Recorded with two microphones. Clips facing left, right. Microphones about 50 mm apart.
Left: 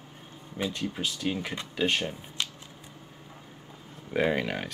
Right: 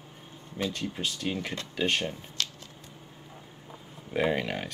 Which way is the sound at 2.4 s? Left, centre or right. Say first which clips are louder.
Even; centre.